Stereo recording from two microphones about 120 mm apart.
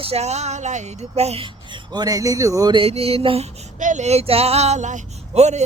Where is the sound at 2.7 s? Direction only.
55° right (ahead or behind).